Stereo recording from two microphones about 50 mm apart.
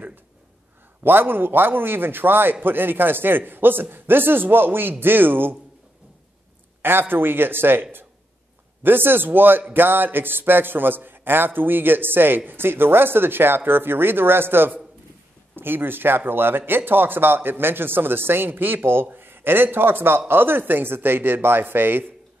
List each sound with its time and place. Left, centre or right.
1.0 s a man's voice: right
6.8 s a man's voice: right